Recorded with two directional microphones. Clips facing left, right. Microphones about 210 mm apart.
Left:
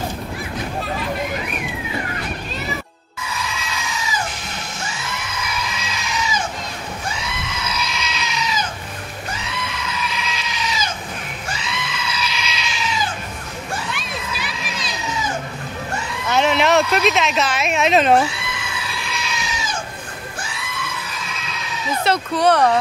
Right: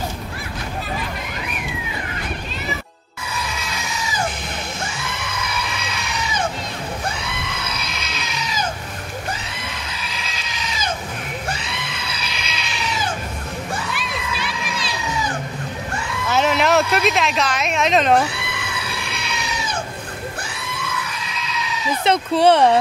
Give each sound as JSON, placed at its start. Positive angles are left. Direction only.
{"t": 5.8, "sound": "goat", "side_deg": -60}
{"t": 11.5, "sound": "goat", "side_deg": -60}
{"t": 16.3, "sound": "speech", "side_deg": -5}
{"t": 18.3, "sound": "goat", "side_deg": -60}
{"t": 22.0, "sound": "speech", "side_deg": -25}